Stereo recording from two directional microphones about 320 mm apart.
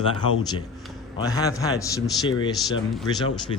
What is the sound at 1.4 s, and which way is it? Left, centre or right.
Speech, centre.